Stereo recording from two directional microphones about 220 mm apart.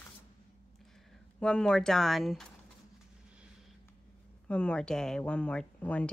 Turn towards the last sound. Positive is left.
turn(degrees=5)  # may be behind; listen again after turning